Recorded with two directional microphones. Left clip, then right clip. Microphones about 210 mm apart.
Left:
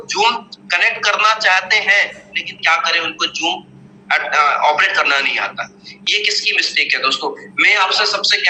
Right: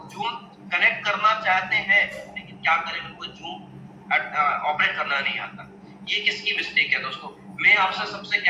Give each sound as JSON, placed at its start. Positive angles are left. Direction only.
{"t": 0.1, "sound": "a man's voice", "side_deg": 45}